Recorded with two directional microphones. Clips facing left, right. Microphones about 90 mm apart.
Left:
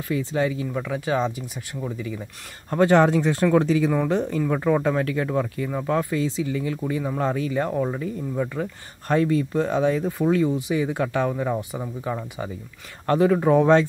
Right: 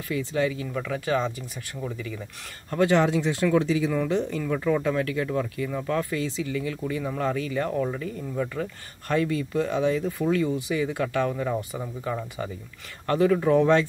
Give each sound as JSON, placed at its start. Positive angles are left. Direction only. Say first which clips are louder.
{"t": 0.1, "sound": "speech", "louder": "left 2 dB", "side_deg": 30}
{"t": 2.7, "sound": "speech", "louder": "left 4 dB", "side_deg": 40}
{"t": 9.1, "sound": "speech", "louder": "left 4 dB", "side_deg": 35}
{"t": 13.0, "sound": "speech", "louder": "left 2 dB", "side_deg": 30}